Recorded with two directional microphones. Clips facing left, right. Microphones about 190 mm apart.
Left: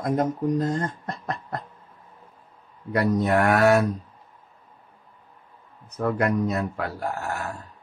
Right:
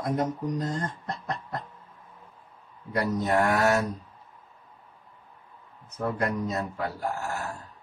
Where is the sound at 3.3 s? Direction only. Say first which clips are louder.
Left 4 dB; 65° left (ahead or behind).